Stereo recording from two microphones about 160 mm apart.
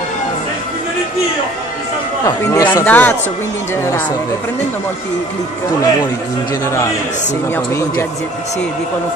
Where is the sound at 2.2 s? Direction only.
20° left (ahead or behind).